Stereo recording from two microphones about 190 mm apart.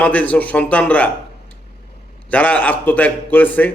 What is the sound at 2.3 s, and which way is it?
A man's voice, 10° left (ahead or behind).